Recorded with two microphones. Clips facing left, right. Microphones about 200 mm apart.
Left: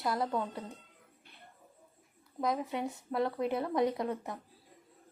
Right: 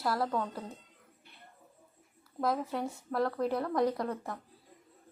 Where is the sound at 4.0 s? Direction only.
20° left (ahead or behind).